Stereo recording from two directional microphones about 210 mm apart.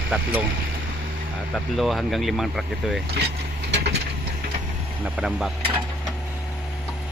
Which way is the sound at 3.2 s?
50° right (ahead or behind).